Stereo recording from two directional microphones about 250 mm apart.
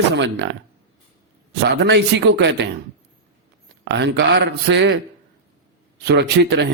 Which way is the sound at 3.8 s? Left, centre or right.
Right.